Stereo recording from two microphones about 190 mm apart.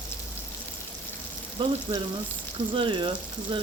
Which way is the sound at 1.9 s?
25° right (ahead or behind).